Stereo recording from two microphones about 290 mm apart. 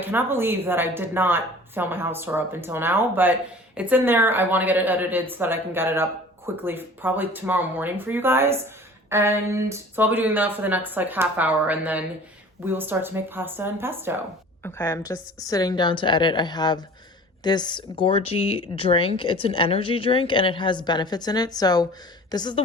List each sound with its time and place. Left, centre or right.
0.0 s speech: centre
14.6 s speech: centre